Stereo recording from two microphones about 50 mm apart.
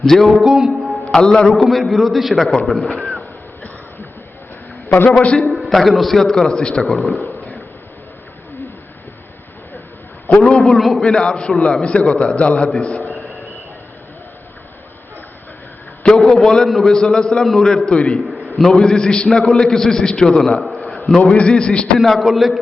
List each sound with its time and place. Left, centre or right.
0.0 s a man's voice: centre
0.4 s music: centre
1.1 s a man's voice: centre
5.2 s a man's voice: left
5.5 s a man's voice: centre
7.2 s a sound: left
10.4 s a man's voice: centre
10.8 s a man's voice: centre
11.0 s a man's voice: centre
16.3 s a man's voice: centre
18.3 s a sound: centre
18.7 s a man's voice: centre
21.2 s a man's voice: left
21.9 s a man's voice: centre